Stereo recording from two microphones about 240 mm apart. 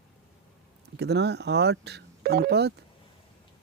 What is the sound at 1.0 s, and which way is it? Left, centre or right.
Speech, right.